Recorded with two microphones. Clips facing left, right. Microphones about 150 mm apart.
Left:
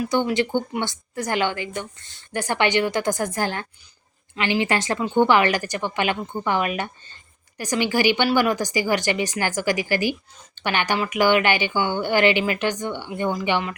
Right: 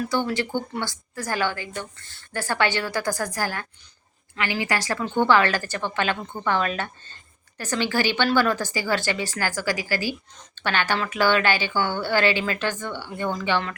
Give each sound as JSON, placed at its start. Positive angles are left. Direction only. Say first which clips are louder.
{"t": 0.0, "sound": "a woman's voice", "louder": "left 3 dB", "side_deg": 15}